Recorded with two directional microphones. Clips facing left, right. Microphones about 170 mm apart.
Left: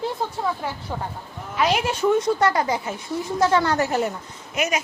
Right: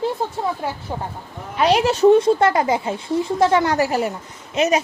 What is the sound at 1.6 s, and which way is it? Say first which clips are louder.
Speech: right 5 dB; 35° right (ahead or behind).